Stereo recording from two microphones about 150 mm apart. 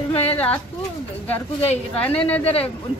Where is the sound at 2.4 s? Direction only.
40° left (ahead or behind).